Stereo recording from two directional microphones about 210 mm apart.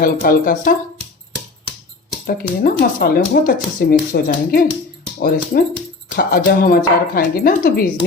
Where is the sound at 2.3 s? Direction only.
45° left (ahead or behind).